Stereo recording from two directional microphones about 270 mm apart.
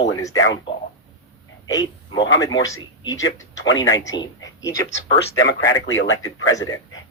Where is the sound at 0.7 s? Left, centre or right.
Centre.